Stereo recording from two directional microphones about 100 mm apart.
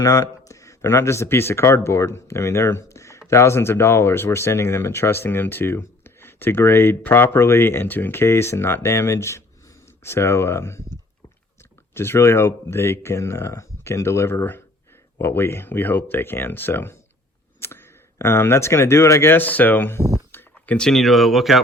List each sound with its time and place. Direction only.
0.0 s speech: 35° left (ahead or behind)
11.9 s speech: 25° left (ahead or behind)
20.0 s a sound: 35° right (ahead or behind)
20.3 s speech: 10° left (ahead or behind)